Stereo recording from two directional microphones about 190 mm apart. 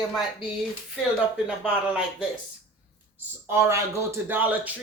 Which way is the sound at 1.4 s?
5° right (ahead or behind).